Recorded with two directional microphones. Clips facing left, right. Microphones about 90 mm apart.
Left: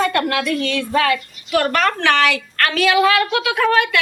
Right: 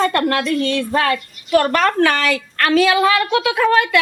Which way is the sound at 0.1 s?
35° right (ahead or behind).